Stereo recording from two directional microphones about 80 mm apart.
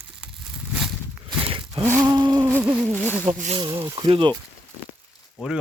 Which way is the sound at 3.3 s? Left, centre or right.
Right.